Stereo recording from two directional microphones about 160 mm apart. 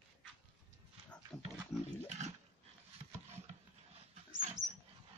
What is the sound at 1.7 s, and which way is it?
Wild animals, centre (ahead or behind).